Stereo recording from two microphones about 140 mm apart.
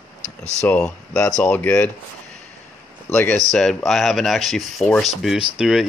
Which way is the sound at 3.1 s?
15° left (ahead or behind).